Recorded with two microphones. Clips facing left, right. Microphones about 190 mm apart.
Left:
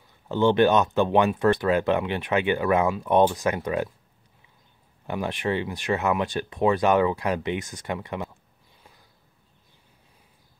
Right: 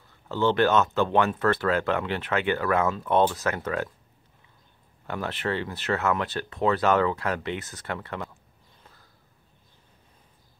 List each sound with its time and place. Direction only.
0.3 s speech: 15° left (ahead or behind)
5.0 s speech: 15° left (ahead or behind)